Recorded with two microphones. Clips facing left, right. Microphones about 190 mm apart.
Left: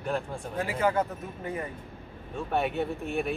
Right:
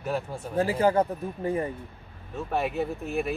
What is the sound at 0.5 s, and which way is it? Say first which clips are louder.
Speech: right 5 dB; 30° right (ahead or behind).